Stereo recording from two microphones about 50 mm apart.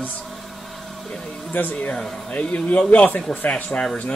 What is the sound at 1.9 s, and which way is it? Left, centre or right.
Speech, centre.